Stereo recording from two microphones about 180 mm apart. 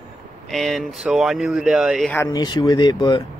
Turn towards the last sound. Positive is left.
turn(degrees=25)  # may be behind; listen again after turning